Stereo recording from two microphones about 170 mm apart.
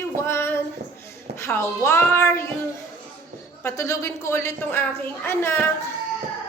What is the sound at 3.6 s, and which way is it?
A child's voice, 20° left (ahead or behind).